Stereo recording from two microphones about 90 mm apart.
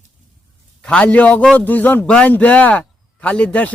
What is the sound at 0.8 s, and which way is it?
Speech, 10° left (ahead or behind).